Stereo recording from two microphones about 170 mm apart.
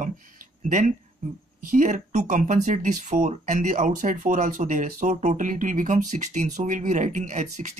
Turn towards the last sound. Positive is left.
turn(degrees=-45)  # may be behind; listen again after turning